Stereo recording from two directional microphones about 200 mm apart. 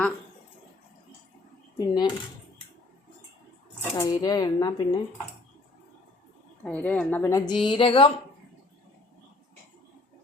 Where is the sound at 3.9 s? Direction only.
15° left (ahead or behind).